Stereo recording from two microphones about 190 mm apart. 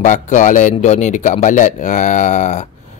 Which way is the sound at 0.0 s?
40° left (ahead or behind).